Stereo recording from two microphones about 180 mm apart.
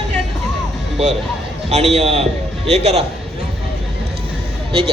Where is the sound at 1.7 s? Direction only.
40° right (ahead or behind).